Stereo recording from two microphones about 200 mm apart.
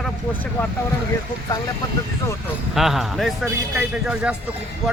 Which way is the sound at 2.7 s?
Centre (ahead or behind).